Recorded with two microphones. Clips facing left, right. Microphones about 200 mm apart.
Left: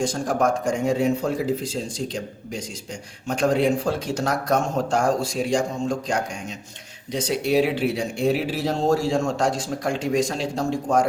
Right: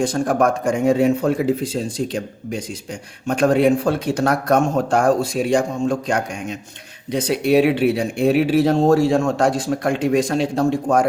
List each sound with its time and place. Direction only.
0.0 s speech: 60° right (ahead or behind)
3.2 s speech: 60° right (ahead or behind)